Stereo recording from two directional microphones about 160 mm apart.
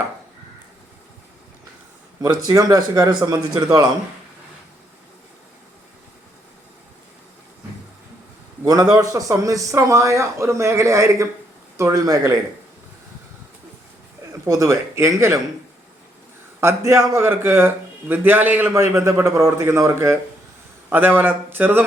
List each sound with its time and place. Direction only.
2.2 s a man's voice: 20° right (ahead or behind)
8.6 s a man's voice: 20° right (ahead or behind)
14.4 s a man's voice: 20° right (ahead or behind)
16.6 s a man's voice: 15° right (ahead or behind)